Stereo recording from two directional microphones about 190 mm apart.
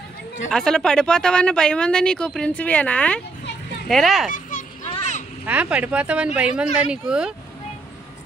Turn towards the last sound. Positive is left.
turn(degrees=-5)  # may be behind; listen again after turning